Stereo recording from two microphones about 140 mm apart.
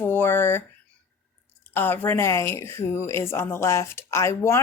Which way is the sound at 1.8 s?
15° left (ahead or behind).